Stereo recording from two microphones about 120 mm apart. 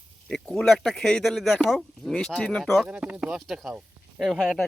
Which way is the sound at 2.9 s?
10° right (ahead or behind).